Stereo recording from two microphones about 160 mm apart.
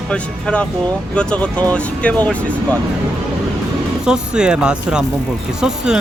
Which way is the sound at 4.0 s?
5° right (ahead or behind).